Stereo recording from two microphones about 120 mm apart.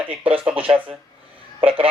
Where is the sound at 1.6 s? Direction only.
50° right (ahead or behind).